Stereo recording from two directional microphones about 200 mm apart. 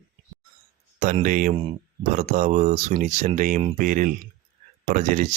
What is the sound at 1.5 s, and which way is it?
Speech, 25° right (ahead or behind).